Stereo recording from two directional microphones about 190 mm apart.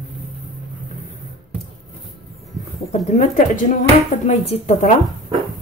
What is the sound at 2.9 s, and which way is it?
A woman's voice, 35° left (ahead or behind).